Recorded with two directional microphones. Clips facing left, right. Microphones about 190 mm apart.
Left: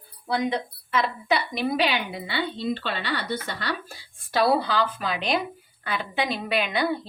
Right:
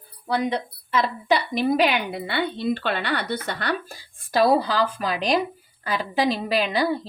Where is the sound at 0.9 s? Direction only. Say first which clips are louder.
Right 3 dB; 35° right (ahead or behind); by 3.7 s 60° right (ahead or behind).